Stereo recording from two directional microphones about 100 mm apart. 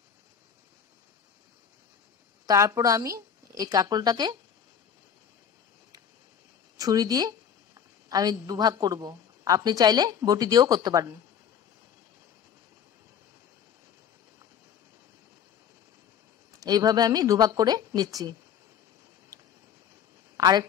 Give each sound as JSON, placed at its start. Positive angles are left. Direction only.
{"t": 2.4, "sound": "speech", "side_deg": -30}
{"t": 6.8, "sound": "a woman's voice", "side_deg": -40}
{"t": 16.5, "sound": "speech", "side_deg": -40}
{"t": 19.3, "sound": "a sound", "side_deg": -35}
{"t": 20.3, "sound": "a woman's voice", "side_deg": -40}